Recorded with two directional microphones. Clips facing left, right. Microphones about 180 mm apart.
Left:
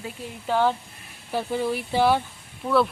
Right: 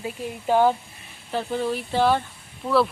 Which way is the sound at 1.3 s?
10° left (ahead or behind).